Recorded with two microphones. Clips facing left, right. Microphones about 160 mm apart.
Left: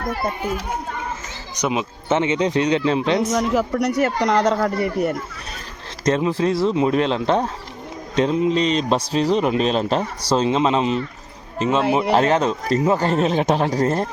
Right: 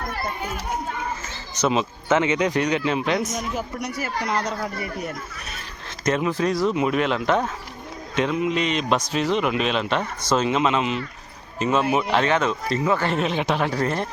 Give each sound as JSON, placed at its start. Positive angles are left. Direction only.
{"t": 1.5, "sound": "speech", "side_deg": 15}
{"t": 2.0, "sound": "speech", "side_deg": 25}
{"t": 3.3, "sound": "speech", "side_deg": 80}
{"t": 6.1, "sound": "a man's voice", "side_deg": 30}